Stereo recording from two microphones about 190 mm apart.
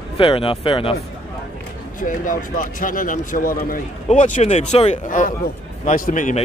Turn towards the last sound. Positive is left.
turn(degrees=40)  # may be behind; listen again after turning